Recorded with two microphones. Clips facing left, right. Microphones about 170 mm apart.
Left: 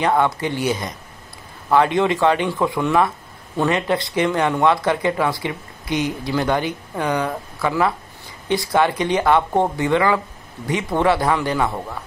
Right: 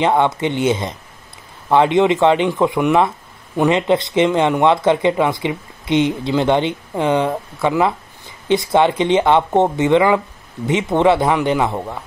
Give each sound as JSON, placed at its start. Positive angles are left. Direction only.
{"t": 0.0, "sound": "speech", "side_deg": -20}